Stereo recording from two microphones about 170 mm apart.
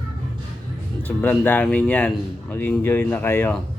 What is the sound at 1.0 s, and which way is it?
Speech, 10° left (ahead or behind).